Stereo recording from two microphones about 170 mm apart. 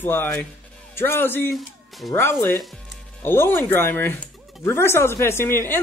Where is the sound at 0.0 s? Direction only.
10° left (ahead or behind).